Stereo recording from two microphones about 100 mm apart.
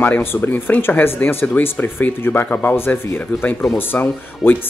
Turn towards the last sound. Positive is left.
turn(degrees=20)  # may be behind; listen again after turning